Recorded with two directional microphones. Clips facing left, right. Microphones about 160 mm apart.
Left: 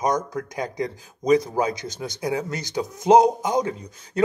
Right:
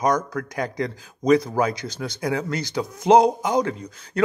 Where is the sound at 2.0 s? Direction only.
25° left (ahead or behind).